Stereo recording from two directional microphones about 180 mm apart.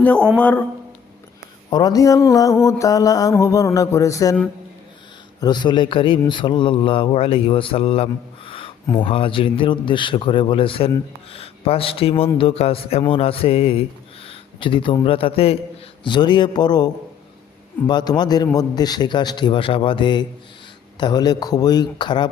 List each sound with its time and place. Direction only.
0.3 s a man's voice: 5° left (ahead or behind)
1.7 s a man's voice: 20° left (ahead or behind)
5.4 s a man's voice: 25° left (ahead or behind)